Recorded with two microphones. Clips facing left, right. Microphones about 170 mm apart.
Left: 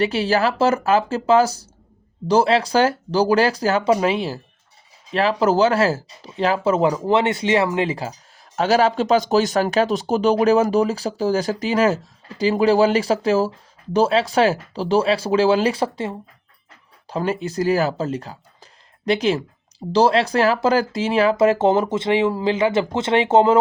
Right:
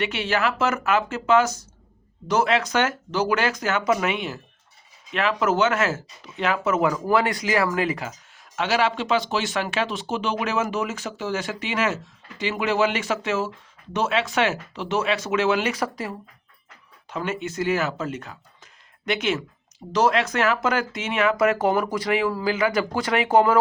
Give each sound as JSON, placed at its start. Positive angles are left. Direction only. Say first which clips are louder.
{"t": 0.0, "sound": "speech", "louder": "left 5 dB", "side_deg": 35}